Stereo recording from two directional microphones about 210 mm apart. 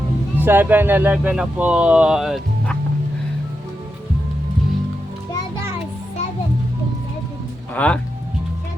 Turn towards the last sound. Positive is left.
turn(degrees=5)  # may be behind; listen again after turning